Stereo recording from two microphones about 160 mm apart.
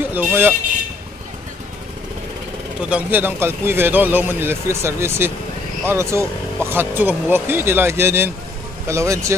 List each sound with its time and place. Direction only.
0.1 s speech: 10° right (ahead or behind)
2.8 s speech: 10° right (ahead or behind)